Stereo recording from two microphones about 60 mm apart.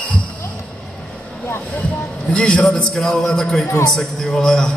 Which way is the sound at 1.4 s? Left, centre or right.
Left.